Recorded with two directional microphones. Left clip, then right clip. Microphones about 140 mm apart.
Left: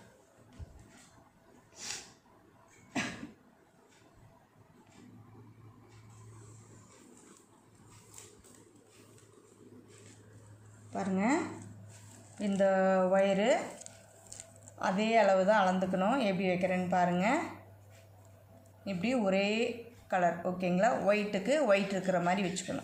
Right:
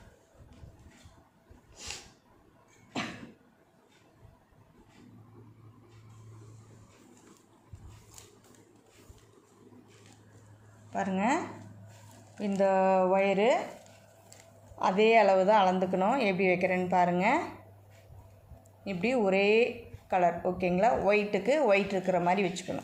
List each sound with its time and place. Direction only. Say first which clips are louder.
1.7 s a sound: even; 35° right (ahead or behind)
10.9 s speech: right 3 dB; 45° right (ahead or behind)
12.4 s a woman's voice: right 2 dB; 25° right (ahead or behind)
14.8 s a woman's voice: right 5 dB; 30° right (ahead or behind)
18.9 s a woman's voice: right 4 dB; 30° right (ahead or behind)